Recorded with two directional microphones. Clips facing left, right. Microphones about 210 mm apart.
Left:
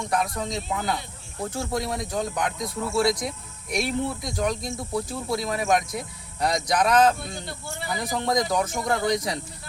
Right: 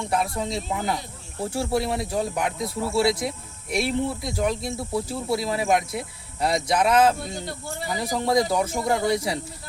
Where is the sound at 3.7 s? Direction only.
5° right (ahead or behind).